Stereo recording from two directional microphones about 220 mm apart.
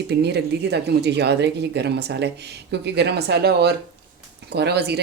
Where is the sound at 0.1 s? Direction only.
50° right (ahead or behind).